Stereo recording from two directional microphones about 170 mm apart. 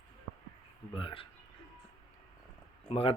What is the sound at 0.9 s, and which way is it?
Speech, 30° left (ahead or behind).